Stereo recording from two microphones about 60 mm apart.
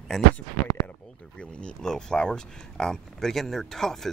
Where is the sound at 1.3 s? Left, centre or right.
Centre.